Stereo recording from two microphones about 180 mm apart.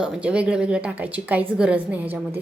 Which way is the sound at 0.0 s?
5° right (ahead or behind).